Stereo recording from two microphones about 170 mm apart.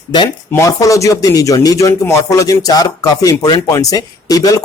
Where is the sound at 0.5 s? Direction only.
20° left (ahead or behind).